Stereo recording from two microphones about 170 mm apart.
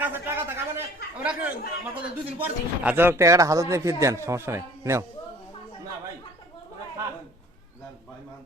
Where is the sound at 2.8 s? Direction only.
10° right (ahead or behind).